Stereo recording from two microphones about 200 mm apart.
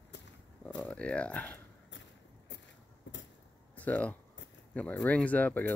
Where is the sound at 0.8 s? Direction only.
5° left (ahead or behind).